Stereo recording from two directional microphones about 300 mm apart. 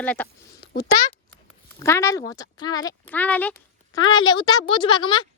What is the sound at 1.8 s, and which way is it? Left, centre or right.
A woman's voice, centre.